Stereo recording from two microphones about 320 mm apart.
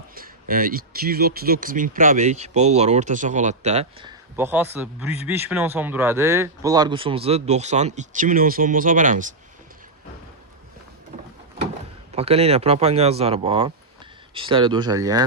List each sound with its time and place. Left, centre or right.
0.1 s speech: right
12.1 s speech: centre